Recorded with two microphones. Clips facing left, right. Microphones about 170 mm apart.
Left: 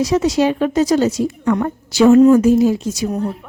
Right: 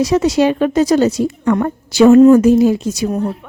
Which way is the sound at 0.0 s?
65° right (ahead or behind).